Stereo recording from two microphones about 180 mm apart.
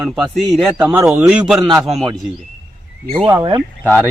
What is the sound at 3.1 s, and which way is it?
Speech, 30° right (ahead or behind).